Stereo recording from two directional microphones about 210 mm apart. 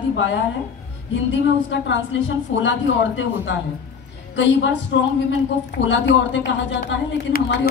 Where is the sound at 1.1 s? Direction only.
60° left (ahead or behind).